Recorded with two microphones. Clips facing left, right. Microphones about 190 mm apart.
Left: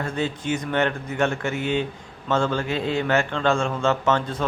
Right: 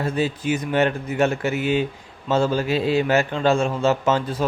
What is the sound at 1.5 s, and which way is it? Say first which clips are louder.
Speech: right 3 dB; 25° left (ahead or behind).